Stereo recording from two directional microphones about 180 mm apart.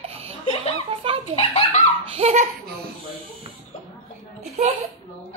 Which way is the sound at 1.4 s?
35° left (ahead or behind).